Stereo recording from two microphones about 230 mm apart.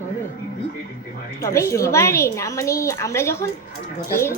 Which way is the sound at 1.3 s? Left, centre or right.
Centre.